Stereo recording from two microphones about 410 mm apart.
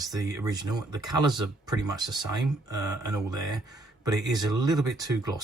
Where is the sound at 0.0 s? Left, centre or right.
Centre.